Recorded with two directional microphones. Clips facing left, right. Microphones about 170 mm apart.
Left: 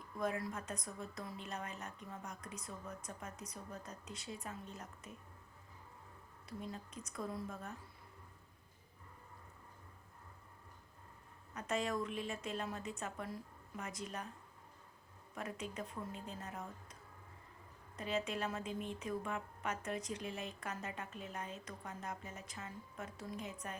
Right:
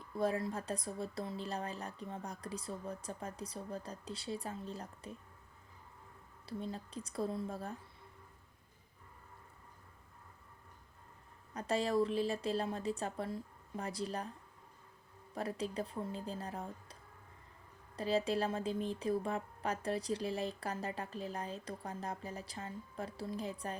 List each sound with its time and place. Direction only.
0.2 s a woman's voice: 30° right (ahead or behind)
6.4 s a woman's voice: 30° right (ahead or behind)
11.5 s a woman's voice: 35° right (ahead or behind)
15.4 s a woman's voice: 35° right (ahead or behind)